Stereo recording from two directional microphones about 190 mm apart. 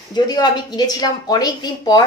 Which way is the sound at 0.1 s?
20° left (ahead or behind).